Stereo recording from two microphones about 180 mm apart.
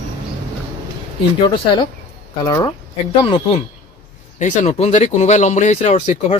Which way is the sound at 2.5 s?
20° left (ahead or behind).